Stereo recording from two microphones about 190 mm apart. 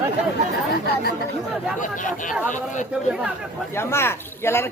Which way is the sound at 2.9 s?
5° right (ahead or behind).